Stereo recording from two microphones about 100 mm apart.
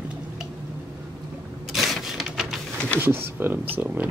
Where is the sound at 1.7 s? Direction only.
5° right (ahead or behind).